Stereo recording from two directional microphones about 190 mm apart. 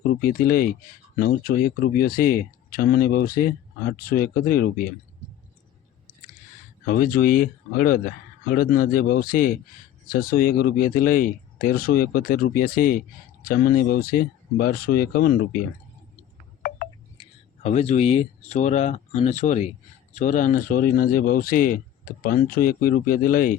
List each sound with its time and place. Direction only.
0.2 s speech: 50° left (ahead or behind)
6.8 s speech: 50° left (ahead or behind)
16.6 s a sound: 50° left (ahead or behind)
17.2 s speech: 35° left (ahead or behind)